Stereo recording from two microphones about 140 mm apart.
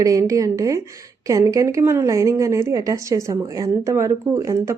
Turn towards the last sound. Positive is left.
turn(degrees=-20)  # may be behind; listen again after turning